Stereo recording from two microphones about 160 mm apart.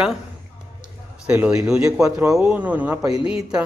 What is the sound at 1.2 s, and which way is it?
A man's voice, 5° right (ahead or behind).